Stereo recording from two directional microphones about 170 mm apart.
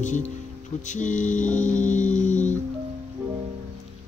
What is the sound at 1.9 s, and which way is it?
Music, 45° left (ahead or behind).